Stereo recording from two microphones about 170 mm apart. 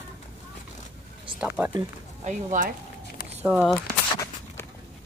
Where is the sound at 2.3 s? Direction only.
50° right (ahead or behind).